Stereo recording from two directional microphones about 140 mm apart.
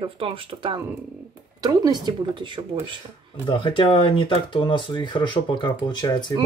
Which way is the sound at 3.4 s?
35° left (ahead or behind).